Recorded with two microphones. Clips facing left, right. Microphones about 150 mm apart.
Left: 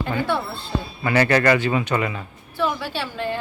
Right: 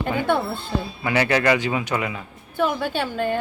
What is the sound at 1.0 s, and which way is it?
Speech, 5° right (ahead or behind).